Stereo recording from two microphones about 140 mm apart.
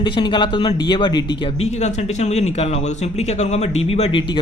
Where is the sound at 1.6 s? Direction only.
55° left (ahead or behind).